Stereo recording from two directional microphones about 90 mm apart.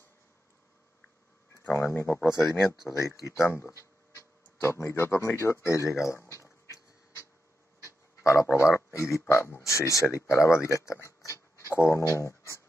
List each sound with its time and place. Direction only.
1.6 s speech: 25° left (ahead or behind)
7.8 s a sound: 35° left (ahead or behind)
9.3 s speech: 30° left (ahead or behind)